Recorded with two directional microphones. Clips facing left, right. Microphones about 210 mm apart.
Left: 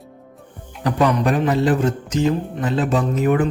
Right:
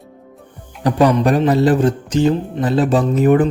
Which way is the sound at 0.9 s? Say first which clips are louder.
Right 4 dB; 35° right (ahead or behind).